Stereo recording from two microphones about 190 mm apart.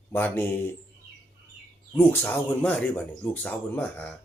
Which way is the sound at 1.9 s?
10° left (ahead or behind).